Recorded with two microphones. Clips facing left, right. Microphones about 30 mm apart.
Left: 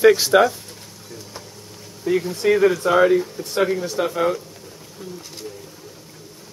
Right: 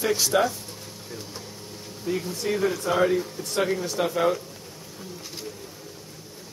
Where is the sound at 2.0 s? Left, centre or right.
Left.